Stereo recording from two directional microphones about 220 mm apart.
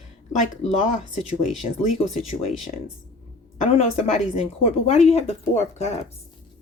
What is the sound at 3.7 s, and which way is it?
Speech, 25° left (ahead or behind).